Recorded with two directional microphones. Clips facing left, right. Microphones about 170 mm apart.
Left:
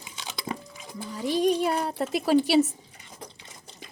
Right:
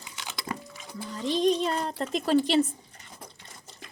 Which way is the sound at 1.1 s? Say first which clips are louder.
Left 1 dB; 10° left (ahead or behind).